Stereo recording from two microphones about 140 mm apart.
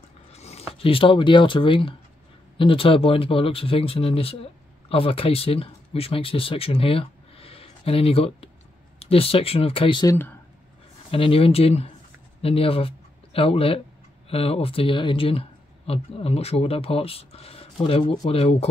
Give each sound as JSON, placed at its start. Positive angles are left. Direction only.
{"t": 0.3, "sound": "a sound", "side_deg": 50}
{"t": 0.7, "sound": "speech", "side_deg": 40}
{"t": 10.0, "sound": "speech", "side_deg": 15}
{"t": 11.1, "sound": "speech", "side_deg": 40}